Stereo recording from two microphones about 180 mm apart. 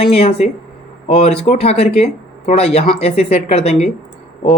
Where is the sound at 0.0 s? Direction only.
35° left (ahead or behind).